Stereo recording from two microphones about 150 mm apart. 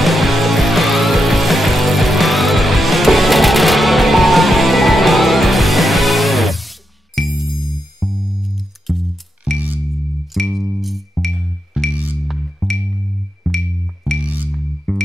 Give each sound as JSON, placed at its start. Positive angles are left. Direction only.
{"t": 0.0, "sound": "music", "side_deg": 0}